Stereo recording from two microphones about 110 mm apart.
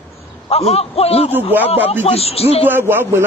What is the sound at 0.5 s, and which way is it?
Speech, 65° left (ahead or behind).